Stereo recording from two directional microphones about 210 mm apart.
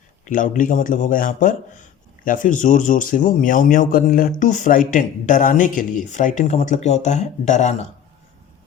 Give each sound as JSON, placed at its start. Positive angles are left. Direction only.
{"t": 0.3, "sound": "a man's voice", "side_deg": 40}